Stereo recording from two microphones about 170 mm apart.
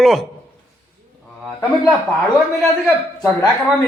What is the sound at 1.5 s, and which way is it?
Speech, 15° left (ahead or behind).